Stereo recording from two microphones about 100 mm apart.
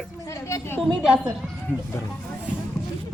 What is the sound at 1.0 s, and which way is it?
Speech, 10° right (ahead or behind).